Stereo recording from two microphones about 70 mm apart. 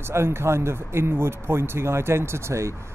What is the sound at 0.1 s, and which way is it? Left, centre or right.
Speech, right.